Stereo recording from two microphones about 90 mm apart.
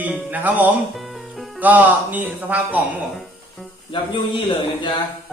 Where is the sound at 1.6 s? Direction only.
20° right (ahead or behind).